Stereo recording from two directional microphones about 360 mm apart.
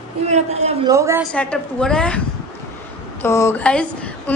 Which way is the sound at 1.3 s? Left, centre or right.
Centre.